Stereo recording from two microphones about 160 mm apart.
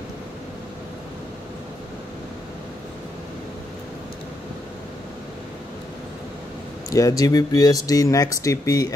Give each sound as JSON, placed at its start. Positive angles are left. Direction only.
{"t": 6.9, "sound": "speech", "side_deg": 20}